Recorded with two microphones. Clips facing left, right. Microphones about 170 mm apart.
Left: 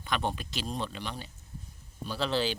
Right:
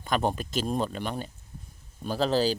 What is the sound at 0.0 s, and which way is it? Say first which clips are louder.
Speech: right 5 dB; 45° right (ahead or behind).